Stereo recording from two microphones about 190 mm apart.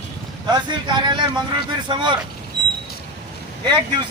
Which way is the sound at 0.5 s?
25° right (ahead or behind).